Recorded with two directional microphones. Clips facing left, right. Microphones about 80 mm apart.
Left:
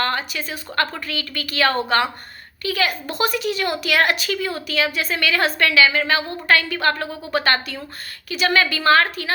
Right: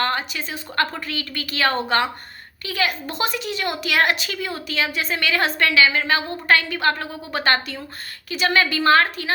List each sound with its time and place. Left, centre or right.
0.0 s a woman's voice: right